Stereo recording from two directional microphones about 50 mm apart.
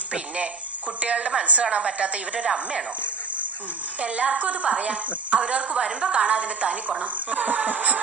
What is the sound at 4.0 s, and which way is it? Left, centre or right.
A woman's voice, right.